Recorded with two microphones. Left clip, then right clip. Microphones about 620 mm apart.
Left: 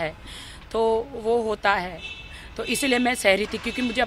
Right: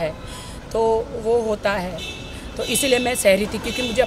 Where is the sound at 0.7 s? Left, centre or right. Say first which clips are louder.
Right 3 dB; left.